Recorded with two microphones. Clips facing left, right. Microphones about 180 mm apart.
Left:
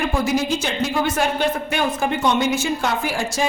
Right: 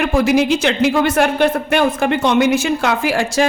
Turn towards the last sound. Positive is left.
turn(degrees=-75)  # may be behind; listen again after turning